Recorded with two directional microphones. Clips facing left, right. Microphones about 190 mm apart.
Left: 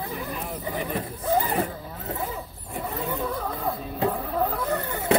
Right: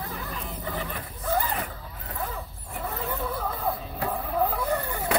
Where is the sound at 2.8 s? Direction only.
15° left (ahead or behind).